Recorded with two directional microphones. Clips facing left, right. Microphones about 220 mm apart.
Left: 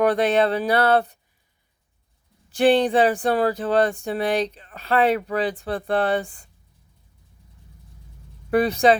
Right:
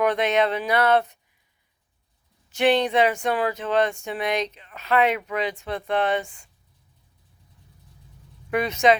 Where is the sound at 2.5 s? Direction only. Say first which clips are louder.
Left 3 dB; 30° left (ahead or behind).